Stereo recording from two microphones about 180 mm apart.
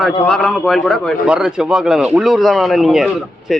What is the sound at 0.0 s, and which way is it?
A man's voice, centre (ahead or behind).